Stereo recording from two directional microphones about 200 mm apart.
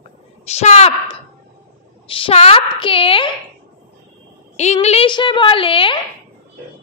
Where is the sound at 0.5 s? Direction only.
35° left (ahead or behind).